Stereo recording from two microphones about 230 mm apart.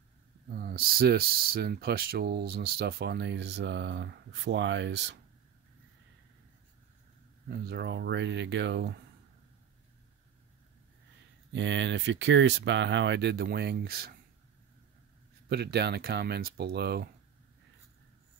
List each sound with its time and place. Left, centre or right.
0.5 s speech: right
7.4 s speech: right
11.5 s speech: right
15.4 s speech: right